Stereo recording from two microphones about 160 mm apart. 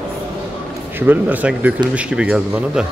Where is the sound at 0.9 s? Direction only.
10° right (ahead or behind).